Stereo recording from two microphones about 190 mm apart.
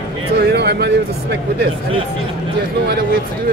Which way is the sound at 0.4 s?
60° right (ahead or behind).